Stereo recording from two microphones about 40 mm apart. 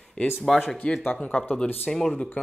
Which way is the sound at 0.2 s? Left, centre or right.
Left.